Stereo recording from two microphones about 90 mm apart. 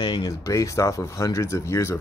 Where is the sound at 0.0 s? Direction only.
60° left (ahead or behind).